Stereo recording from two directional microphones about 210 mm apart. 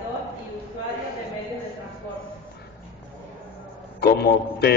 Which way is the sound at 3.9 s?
50° left (ahead or behind).